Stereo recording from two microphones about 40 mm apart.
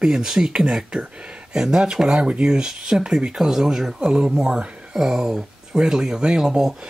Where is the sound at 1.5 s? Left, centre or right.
Centre.